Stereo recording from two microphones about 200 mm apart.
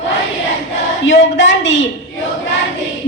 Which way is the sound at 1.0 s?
70° left (ahead or behind).